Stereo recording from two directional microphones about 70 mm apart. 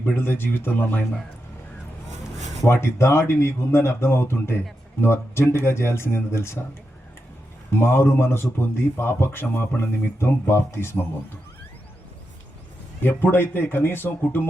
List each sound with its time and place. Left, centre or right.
0.0 s a man's voice: left
2.6 s a man's voice: left
7.7 s a man's voice: left
13.0 s a man's voice: left